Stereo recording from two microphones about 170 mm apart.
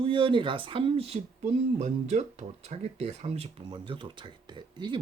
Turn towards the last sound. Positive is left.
turn(degrees=-25)  # may be behind; listen again after turning